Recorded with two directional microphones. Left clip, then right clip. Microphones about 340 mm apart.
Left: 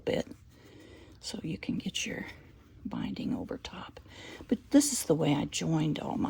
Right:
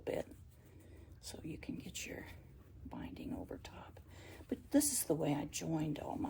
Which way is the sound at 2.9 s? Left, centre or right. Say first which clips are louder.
Left 10 dB; left.